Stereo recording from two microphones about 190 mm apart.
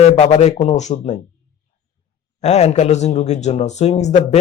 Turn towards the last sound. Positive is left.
turn(degrees=35)  # may be behind; listen again after turning